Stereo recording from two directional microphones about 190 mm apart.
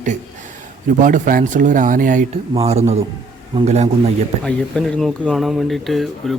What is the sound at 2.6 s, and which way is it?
A man's voice, 30° right (ahead or behind).